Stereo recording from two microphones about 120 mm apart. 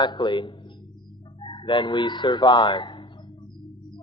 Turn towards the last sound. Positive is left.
turn(degrees=40)  # may be behind; listen again after turning